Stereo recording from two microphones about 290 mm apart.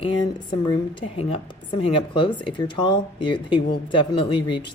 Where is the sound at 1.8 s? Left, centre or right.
Centre.